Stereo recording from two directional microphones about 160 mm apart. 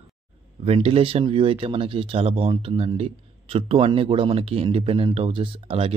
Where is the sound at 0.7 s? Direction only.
35° right (ahead or behind).